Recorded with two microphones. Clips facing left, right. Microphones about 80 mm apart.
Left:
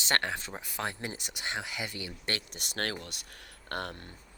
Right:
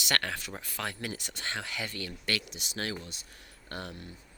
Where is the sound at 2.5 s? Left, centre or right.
Left.